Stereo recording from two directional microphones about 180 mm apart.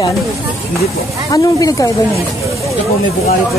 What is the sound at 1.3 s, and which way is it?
Speech, 20° left (ahead or behind).